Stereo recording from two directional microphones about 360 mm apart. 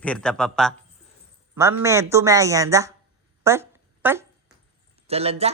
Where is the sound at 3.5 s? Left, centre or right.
Centre.